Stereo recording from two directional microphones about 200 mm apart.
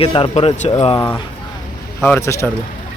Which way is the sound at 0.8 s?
15° left (ahead or behind).